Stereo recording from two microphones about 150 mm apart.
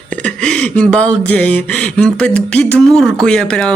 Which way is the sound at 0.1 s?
5° left (ahead or behind).